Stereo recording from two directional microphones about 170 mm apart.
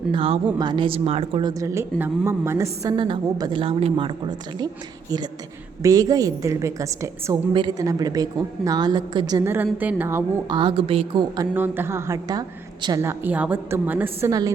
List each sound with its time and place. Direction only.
0.1 s speech: 30° right (ahead or behind)
2.9 s speech: 30° right (ahead or behind)
5.8 s a woman's voice: 20° right (ahead or behind)
10.5 s a woman's voice: 30° right (ahead or behind)
11.3 s a woman's voice: 10° right (ahead or behind)